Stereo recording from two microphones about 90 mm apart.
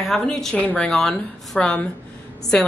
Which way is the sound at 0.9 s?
5° left (ahead or behind).